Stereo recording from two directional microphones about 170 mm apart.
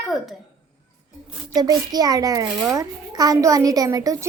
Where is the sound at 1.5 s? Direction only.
20° right (ahead or behind).